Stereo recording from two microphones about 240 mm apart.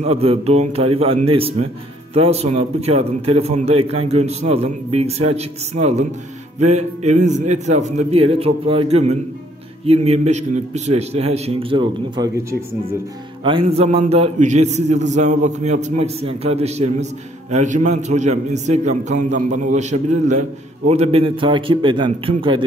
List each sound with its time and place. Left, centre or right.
0.0 s a man's voice: right